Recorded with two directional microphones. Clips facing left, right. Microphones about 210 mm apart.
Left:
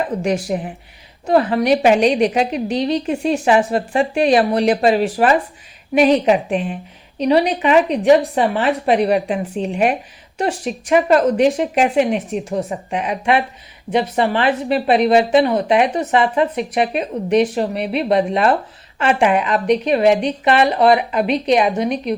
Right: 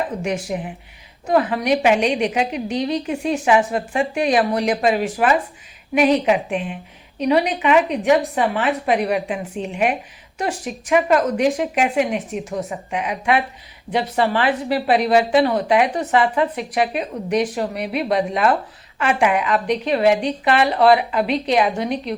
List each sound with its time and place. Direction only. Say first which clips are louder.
0.5 s a woman's voice: left 3 dB; 35° left (ahead or behind); by 22.1 s 20° left (ahead or behind)